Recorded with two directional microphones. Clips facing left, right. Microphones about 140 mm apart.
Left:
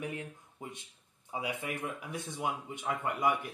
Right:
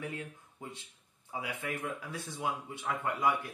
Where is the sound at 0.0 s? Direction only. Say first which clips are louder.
Left 1 dB; 15° left (ahead or behind).